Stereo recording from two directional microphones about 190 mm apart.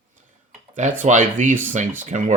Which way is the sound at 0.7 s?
40° right (ahead or behind).